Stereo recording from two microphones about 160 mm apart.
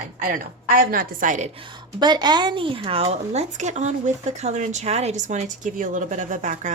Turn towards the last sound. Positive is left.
turn(degrees=-50)  # may be behind; listen again after turning